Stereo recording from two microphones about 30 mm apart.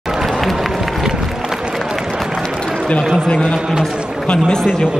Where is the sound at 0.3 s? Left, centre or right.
Centre.